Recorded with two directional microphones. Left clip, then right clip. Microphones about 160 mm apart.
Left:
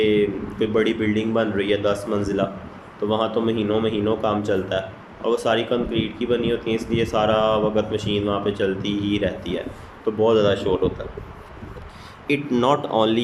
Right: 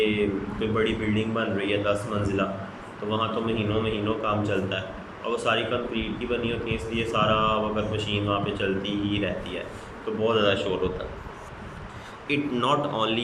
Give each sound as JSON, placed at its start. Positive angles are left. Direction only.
{"t": 0.6, "sound": "speech", "side_deg": 35}
{"t": 12.3, "sound": "speech", "side_deg": 40}